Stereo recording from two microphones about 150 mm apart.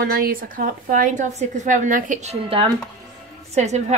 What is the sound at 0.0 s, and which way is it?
A woman's voice, 75° right (ahead or behind).